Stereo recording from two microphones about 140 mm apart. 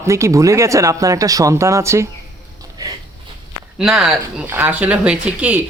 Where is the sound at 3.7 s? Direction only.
5° right (ahead or behind).